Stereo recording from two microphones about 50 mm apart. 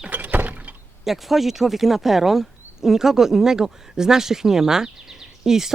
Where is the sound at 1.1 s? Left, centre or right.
Centre.